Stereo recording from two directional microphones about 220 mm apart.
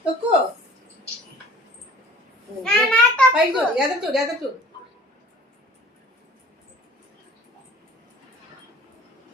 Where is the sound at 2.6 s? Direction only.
5° left (ahead or behind).